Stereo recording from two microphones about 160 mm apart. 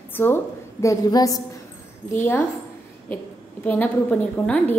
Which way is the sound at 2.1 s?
10° left (ahead or behind).